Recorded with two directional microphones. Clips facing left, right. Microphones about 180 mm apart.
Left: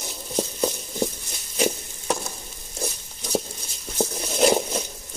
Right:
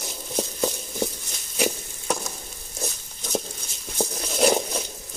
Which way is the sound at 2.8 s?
5° left (ahead or behind).